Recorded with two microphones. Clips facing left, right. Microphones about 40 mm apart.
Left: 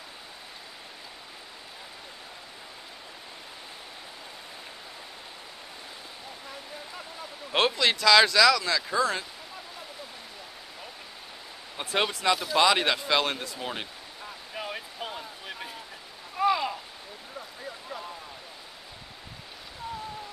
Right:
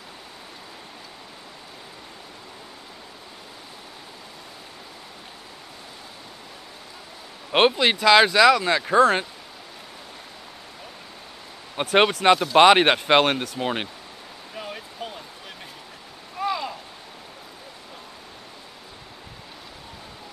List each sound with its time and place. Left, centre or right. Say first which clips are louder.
7.5 s speech: right 6 dB; right
11.7 s speech: right 9 dB; right
14.5 s a sound: right 1 dB; centre